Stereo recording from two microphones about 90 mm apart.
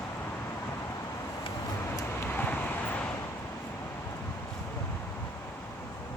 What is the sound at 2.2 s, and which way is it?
Vehicle, 20° left (ahead or behind).